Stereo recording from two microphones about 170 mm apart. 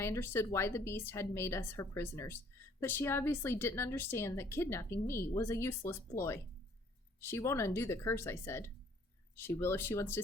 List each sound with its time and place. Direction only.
0.0 s speech: 15° left (ahead or behind)